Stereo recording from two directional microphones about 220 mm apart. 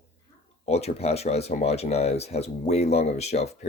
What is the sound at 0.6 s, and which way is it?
Speech, 30° left (ahead or behind).